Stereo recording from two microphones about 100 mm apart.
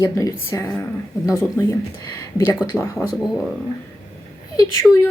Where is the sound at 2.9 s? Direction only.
5° right (ahead or behind).